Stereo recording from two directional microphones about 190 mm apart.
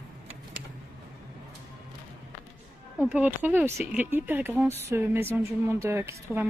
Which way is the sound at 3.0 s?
10° right (ahead or behind).